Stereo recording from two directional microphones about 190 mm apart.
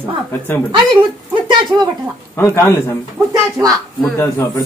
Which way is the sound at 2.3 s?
10° left (ahead or behind).